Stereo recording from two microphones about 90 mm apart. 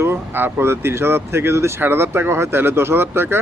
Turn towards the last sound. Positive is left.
turn(degrees=-25)  # may be behind; listen again after turning